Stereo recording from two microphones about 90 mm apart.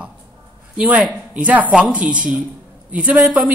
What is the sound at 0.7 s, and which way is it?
A man's voice, 15° right (ahead or behind).